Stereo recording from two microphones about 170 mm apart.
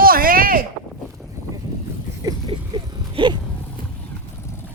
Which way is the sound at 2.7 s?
25° right (ahead or behind).